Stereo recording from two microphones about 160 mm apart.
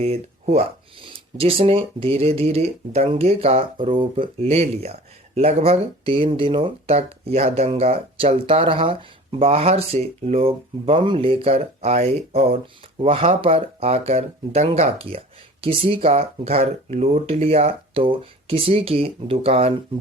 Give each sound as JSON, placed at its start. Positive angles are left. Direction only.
{"t": 0.0, "sound": "speech", "side_deg": -40}